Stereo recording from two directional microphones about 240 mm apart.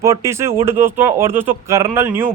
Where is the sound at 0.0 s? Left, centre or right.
Centre.